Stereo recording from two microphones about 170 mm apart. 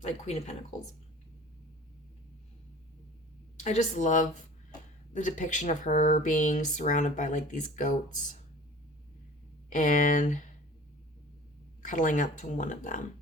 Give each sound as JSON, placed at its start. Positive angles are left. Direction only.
{"t": 0.0, "sound": "speech", "side_deg": 40}
{"t": 3.6, "sound": "speech", "side_deg": 45}
{"t": 9.7, "sound": "speech", "side_deg": 50}
{"t": 11.8, "sound": "speech", "side_deg": 50}